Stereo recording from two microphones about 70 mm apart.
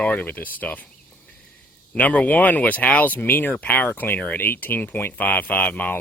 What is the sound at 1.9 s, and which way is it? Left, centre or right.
Speech, centre.